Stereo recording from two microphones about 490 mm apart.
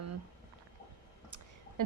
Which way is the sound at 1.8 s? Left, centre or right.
Right.